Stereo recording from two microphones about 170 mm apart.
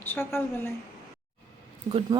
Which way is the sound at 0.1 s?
15° left (ahead or behind).